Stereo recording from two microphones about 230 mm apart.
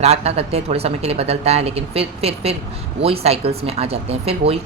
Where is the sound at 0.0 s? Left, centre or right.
Right.